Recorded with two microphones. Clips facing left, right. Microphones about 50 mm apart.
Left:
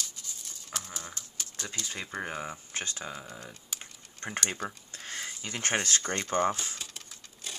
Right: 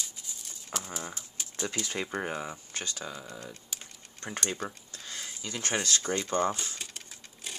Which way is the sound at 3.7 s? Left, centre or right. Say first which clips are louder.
Left 1 dB; left.